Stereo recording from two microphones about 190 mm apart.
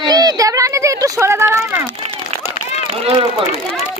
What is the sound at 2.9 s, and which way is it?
Run, 30° right (ahead or behind).